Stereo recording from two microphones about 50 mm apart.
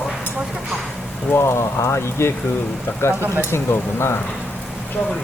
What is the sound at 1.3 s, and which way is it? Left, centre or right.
Speech, left.